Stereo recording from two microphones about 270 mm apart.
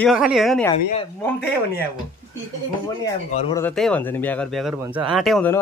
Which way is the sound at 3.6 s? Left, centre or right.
Centre.